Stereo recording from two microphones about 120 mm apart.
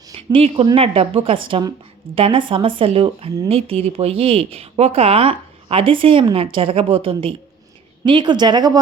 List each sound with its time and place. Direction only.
0.2 s speech: 50° right (ahead or behind)